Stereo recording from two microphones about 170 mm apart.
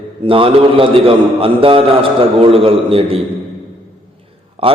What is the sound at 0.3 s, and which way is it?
A man's voice, 30° right (ahead or behind).